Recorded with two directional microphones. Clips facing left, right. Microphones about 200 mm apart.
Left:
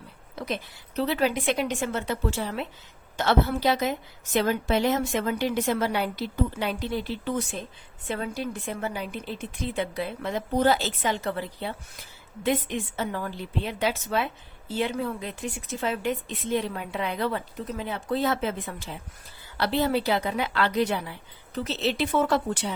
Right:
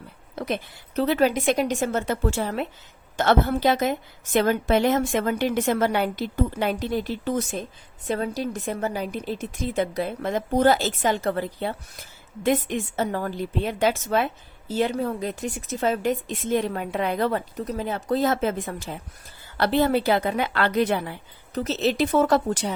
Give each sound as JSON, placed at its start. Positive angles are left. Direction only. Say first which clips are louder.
{"t": 0.3, "sound": "a woman's voice", "louder": "right 4 dB", "side_deg": -55}